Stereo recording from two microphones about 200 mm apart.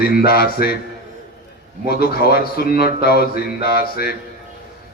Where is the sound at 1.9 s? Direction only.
50° left (ahead or behind).